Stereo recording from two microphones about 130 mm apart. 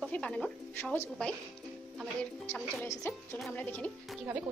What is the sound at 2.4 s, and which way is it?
Speech, 15° left (ahead or behind).